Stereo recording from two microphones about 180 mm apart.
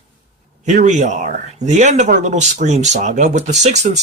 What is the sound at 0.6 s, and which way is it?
A man's voice, 40° right (ahead or behind).